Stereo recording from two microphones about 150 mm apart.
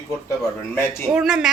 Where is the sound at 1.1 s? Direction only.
5° right (ahead or behind).